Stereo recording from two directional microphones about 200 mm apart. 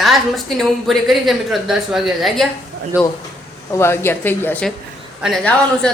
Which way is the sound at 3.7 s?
10° left (ahead or behind).